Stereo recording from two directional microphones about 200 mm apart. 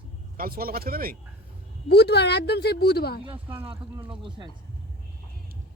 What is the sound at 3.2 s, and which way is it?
Speech, 25° right (ahead or behind).